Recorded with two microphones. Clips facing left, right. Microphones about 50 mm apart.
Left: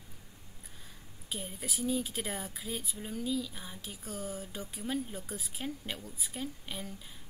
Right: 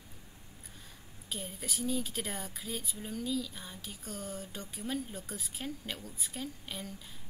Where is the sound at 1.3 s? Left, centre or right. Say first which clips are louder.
Left 1 dB; centre.